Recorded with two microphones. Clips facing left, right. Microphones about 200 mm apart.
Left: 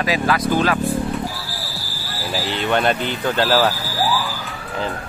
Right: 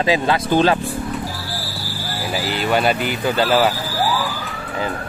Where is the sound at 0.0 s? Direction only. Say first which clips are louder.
Right 2 dB; 25° right (ahead or behind).